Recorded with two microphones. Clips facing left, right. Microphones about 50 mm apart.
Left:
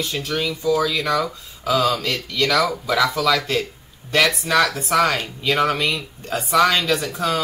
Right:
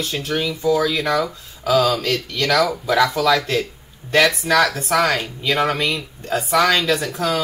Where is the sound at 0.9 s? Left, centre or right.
Right.